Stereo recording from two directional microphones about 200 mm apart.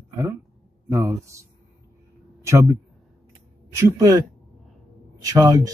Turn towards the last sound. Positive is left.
turn(degrees=-15)  # may be behind; listen again after turning